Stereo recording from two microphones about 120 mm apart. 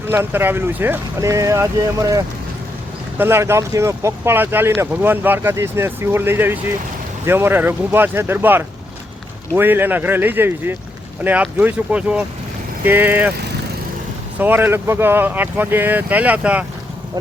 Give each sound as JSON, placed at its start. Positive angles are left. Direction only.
{"t": 0.1, "sound": "speech", "side_deg": -20}
{"t": 14.3, "sound": "speech", "side_deg": -15}